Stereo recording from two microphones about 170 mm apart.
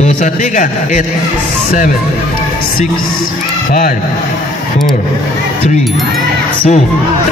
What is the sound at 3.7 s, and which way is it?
Speech, 55° left (ahead or behind).